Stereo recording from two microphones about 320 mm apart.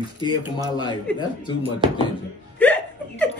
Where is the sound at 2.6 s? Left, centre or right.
Centre.